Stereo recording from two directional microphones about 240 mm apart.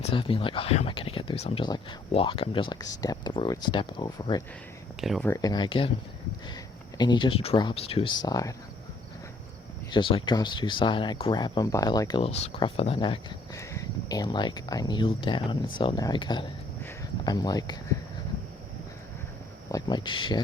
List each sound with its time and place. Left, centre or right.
0.0 s speech: left
4.9 s speech: centre
5.3 s speech: centre
7.0 s speech: centre
9.9 s speech: left
16.8 s a sound: centre
19.7 s speech: centre